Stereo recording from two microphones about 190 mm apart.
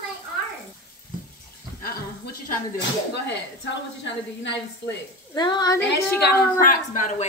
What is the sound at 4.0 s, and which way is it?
Speech, 65° left (ahead or behind).